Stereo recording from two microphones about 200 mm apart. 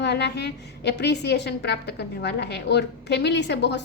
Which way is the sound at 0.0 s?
55° left (ahead or behind).